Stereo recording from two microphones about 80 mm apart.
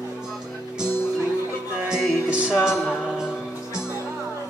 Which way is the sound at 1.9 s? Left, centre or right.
Centre.